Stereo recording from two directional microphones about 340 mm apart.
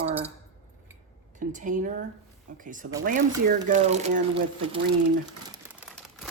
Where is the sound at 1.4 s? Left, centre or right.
Right.